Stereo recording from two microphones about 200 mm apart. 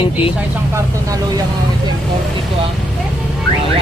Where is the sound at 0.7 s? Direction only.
15° right (ahead or behind).